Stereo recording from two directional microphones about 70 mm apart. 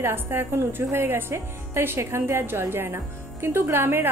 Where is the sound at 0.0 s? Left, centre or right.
Right.